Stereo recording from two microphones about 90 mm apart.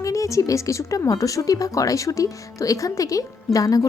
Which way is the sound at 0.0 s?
35° left (ahead or behind).